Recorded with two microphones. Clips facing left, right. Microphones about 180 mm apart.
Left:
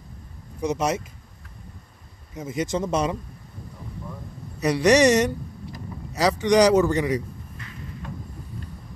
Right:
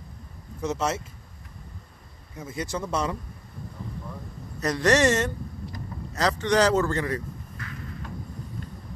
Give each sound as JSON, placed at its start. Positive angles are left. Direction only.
{"t": 0.6, "sound": "speech", "side_deg": 15}
{"t": 2.3, "sound": "speech", "side_deg": 20}
{"t": 4.6, "sound": "speech", "side_deg": 10}